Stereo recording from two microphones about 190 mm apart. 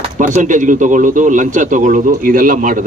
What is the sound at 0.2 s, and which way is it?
A man's voice, 40° right (ahead or behind).